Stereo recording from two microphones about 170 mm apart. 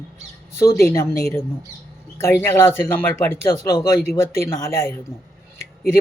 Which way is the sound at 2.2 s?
15° left (ahead or behind).